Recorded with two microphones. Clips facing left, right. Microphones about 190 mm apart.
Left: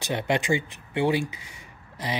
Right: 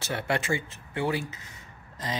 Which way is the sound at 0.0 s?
15° left (ahead or behind).